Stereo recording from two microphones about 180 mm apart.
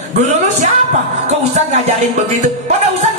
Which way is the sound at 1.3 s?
40° right (ahead or behind).